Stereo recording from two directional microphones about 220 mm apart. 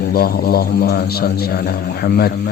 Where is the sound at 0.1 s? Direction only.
45° left (ahead or behind).